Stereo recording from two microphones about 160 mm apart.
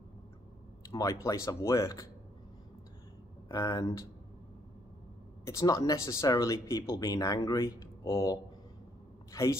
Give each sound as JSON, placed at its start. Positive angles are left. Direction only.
{"t": 0.8, "sound": "speech", "side_deg": 20}
{"t": 3.4, "sound": "speech", "side_deg": 25}
{"t": 5.4, "sound": "a woman's voice", "side_deg": 20}